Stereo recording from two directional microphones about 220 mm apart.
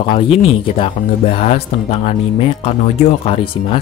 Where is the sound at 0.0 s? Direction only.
25° left (ahead or behind).